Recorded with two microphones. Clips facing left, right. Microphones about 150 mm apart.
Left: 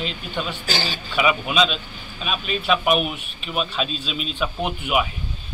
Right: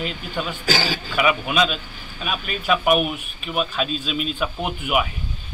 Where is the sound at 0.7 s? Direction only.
90° right.